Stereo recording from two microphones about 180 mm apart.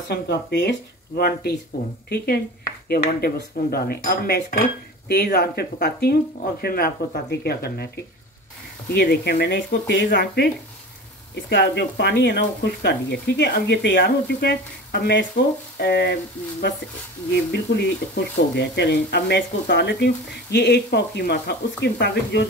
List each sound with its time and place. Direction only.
0.1 s cutlery: 65° left (ahead or behind)
11.4 s speech: 75° left (ahead or behind)
17.3 s speech: 70° left (ahead or behind)
20.5 s cutlery: 65° left (ahead or behind)
21.8 s speech: 70° left (ahead or behind)